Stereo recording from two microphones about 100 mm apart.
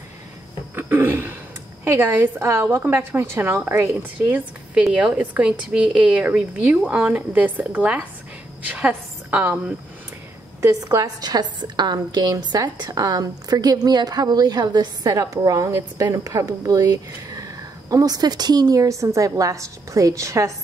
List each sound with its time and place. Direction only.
0.7 s a sound: 20° right (ahead or behind)
1.9 s a woman's voice: 25° right (ahead or behind)
4.8 s a woman's voice: 10° right (ahead or behind)
10.6 s a woman's voice: 35° right (ahead or behind)